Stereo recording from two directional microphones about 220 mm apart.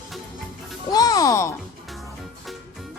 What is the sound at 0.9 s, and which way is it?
Music, 15° left (ahead or behind).